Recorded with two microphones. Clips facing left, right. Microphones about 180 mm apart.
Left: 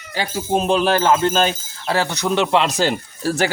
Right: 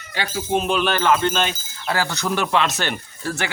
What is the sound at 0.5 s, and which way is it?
Speech, 35° left (ahead or behind).